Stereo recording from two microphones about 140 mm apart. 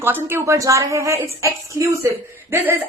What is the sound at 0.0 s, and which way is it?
A woman's voice, 15° right (ahead or behind).